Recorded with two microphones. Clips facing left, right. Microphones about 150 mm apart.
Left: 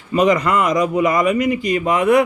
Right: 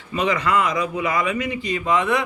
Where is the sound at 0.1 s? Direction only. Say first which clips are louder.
Left 6 dB; 40° left (ahead or behind).